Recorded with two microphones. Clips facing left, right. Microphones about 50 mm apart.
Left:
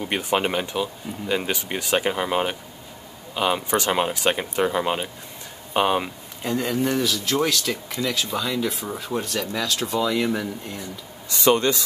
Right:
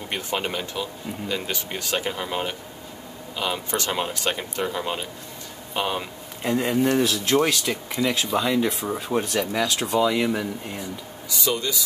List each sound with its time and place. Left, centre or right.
0.0 s speech: centre
6.4 s speech: centre
7.0 s speech: right
7.3 s speech: centre
11.2 s speech: left